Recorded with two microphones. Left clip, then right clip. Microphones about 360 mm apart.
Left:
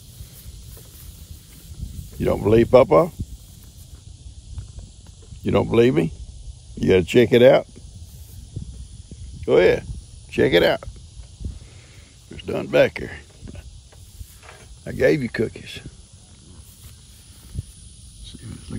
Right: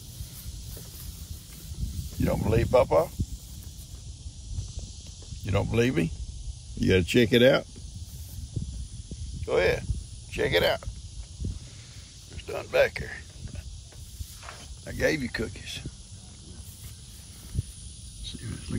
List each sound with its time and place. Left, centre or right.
2.2 s speech: left
5.4 s speech: left
9.5 s speech: left
12.4 s speech: left
14.9 s speech: left
18.2 s a sound: centre